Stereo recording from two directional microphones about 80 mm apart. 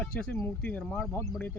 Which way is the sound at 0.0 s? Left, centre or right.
Centre.